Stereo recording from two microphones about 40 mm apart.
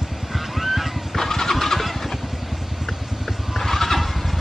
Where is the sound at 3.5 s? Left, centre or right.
Centre.